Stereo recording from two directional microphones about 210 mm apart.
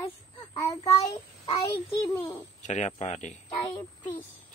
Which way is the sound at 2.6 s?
35° left (ahead or behind).